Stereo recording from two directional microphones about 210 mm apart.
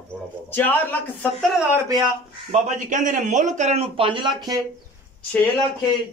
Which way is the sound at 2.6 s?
35° right (ahead or behind).